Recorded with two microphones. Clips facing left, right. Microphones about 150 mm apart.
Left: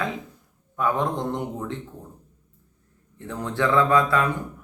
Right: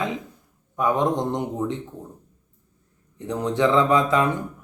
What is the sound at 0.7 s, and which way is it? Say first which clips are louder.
A man's voice: right 3 dB; 20° right (ahead or behind).